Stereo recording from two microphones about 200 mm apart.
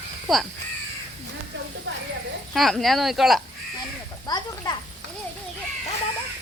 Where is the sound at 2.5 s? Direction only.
Centre (ahead or behind).